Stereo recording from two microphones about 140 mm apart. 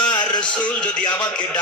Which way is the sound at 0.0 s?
30° left (ahead or behind).